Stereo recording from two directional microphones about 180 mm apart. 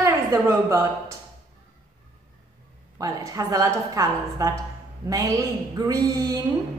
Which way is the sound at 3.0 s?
20° right (ahead or behind).